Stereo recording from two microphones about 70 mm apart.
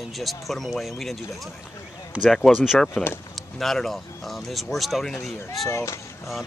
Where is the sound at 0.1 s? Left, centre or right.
Centre.